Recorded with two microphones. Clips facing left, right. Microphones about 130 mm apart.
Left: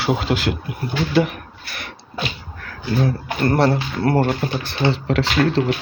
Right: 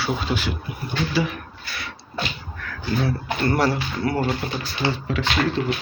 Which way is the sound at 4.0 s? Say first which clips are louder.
Left 6 dB; 60° left (ahead or behind).